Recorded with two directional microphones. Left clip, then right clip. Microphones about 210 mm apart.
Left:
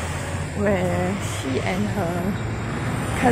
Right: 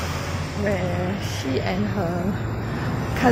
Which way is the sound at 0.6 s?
45° left (ahead or behind).